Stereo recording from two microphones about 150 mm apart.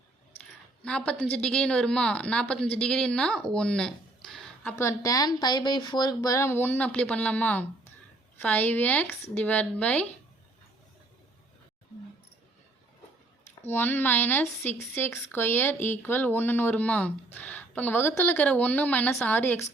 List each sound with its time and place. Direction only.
0.8 s a woman's voice: 5° left (ahead or behind)
4.8 s a woman's voice: 20° left (ahead or behind)
13.7 s a woman's voice: 15° left (ahead or behind)